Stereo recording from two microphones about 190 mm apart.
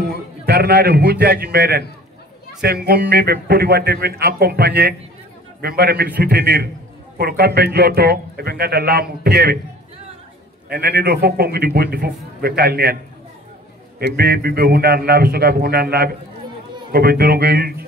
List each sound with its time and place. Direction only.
0.1 s a man's voice: 55° right (ahead or behind)
10.7 s a man's voice: 55° right (ahead or behind)
13.9 s a man's voice: 55° right (ahead or behind)